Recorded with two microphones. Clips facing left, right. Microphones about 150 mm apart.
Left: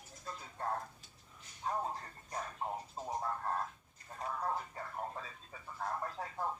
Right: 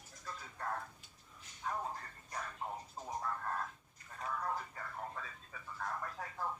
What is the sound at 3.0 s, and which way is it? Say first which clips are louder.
Frog: left 2 dB; 30° left (ahead or behind).